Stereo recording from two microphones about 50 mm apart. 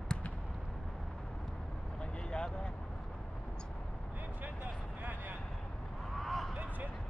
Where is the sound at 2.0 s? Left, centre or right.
Centre.